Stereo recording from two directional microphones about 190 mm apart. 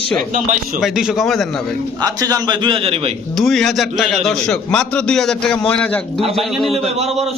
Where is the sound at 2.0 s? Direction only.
20° right (ahead or behind).